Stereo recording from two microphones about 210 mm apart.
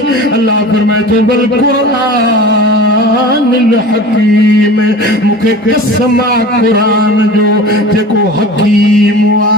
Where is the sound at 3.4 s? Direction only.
60° left (ahead or behind).